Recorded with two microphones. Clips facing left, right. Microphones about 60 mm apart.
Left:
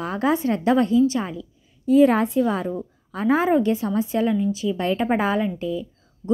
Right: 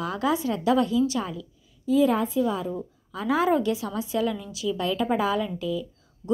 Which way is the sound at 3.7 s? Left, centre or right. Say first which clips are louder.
Left 5 dB; left.